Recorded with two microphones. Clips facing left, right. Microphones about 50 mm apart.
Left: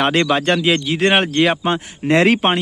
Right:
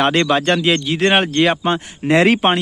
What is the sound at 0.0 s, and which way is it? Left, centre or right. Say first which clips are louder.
Speech: right 1 dB; centre.